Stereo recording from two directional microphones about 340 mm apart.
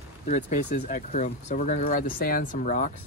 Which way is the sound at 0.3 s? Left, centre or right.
Left.